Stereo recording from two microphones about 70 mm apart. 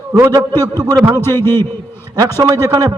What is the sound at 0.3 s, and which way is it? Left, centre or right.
Speech, right.